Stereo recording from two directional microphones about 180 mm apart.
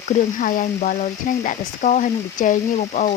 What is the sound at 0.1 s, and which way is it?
Speech, 50° left (ahead or behind).